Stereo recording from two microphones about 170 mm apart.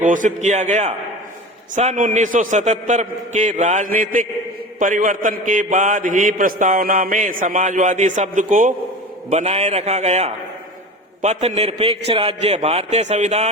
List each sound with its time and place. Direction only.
0.0 s a man's voice: 50° right (ahead or behind)
9.3 s a man's voice: 40° right (ahead or behind)